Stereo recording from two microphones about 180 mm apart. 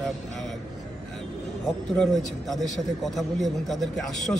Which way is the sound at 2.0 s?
Centre (ahead or behind).